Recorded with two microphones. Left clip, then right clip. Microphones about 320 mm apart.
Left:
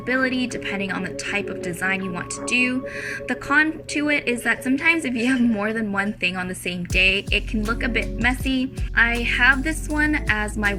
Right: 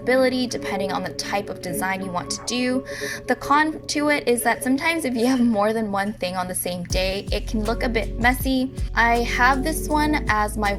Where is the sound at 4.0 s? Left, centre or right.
Centre.